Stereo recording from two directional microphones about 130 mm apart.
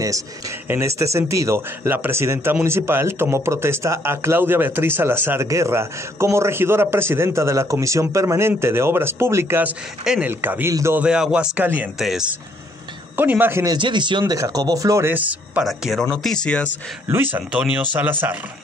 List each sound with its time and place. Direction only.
0.7 s a man's voice: 20° right (ahead or behind)
11.0 s speech: 5° right (ahead or behind)
12.0 s speech: 5° right (ahead or behind)
13.1 s speech: 15° right (ahead or behind)
13.7 s a man's voice: 35° right (ahead or behind); by 15.6 s 10° right (ahead or behind)
15.6 s speech: centre (ahead or behind)
17.1 s speech: 15° right (ahead or behind)